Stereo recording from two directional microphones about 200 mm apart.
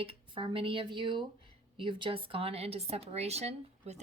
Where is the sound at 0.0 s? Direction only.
25° right (ahead or behind).